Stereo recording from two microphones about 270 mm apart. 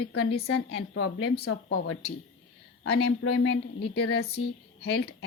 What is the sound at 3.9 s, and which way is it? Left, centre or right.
Speech, left.